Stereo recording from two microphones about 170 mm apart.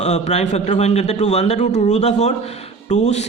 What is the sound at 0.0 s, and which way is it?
A man's voice, 40° left (ahead or behind).